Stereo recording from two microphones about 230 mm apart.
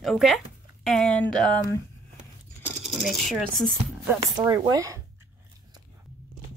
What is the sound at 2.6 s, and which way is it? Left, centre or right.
Speech, centre.